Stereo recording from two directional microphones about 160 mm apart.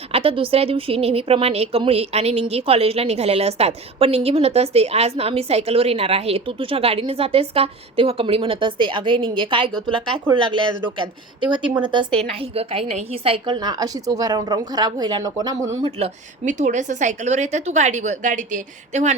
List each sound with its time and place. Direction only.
0.1 s speech: 35° right (ahead or behind)
10.9 s a woman's voice: 30° right (ahead or behind)
15.8 s a woman's voice: 40° right (ahead or behind)